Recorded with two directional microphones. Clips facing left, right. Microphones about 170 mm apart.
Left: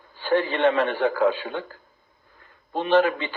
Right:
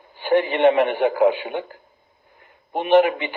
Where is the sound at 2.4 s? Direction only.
15° right (ahead or behind).